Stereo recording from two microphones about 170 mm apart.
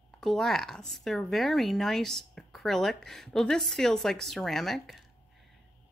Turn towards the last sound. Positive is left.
turn(degrees=0)  # may be behind; listen again after turning